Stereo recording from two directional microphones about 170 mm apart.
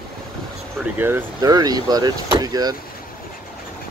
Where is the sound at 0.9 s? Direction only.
15° right (ahead or behind).